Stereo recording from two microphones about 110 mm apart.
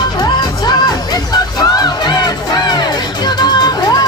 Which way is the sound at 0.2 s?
40° left (ahead or behind).